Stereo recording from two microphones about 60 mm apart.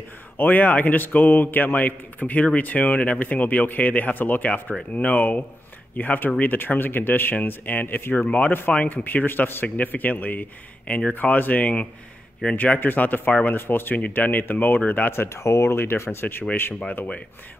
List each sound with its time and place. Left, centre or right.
0.4 s a man's voice: left
15.1 s speech: left
16.9 s a man's voice: left